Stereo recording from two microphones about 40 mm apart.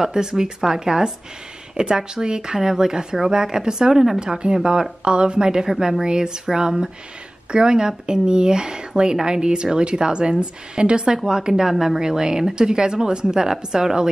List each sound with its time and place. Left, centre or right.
0.0 s speech: centre
4.4 s a woman's voice: right; by 12.0 s centre
12.0 s speech: centre